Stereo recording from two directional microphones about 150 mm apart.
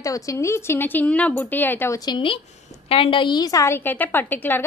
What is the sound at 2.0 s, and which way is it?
A woman's voice, 35° left (ahead or behind).